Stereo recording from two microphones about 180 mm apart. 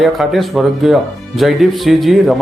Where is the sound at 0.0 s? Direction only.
Centre (ahead or behind).